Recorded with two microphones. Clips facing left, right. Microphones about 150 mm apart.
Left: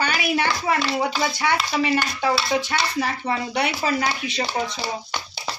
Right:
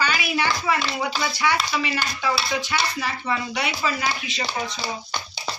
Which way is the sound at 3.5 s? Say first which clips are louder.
Left 3 dB; 55° left (ahead or behind).